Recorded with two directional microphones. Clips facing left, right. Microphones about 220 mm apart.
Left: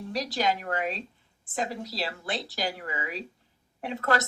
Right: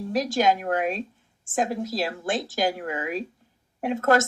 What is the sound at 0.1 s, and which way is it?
A woman's voice, 50° right (ahead or behind).